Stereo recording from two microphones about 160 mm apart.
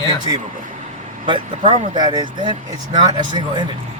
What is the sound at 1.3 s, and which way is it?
Speech, 30° right (ahead or behind).